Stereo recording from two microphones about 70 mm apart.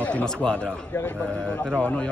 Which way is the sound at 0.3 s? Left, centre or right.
Centre.